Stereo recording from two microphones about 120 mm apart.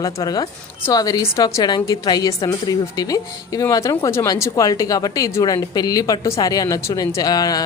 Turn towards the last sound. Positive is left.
turn(degrees=30)  # may be behind; listen again after turning